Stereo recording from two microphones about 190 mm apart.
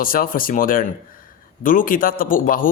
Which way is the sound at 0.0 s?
50° left (ahead or behind).